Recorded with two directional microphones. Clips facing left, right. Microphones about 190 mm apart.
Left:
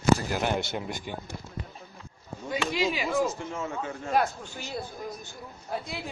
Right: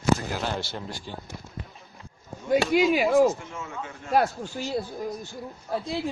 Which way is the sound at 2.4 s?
50° right (ahead or behind).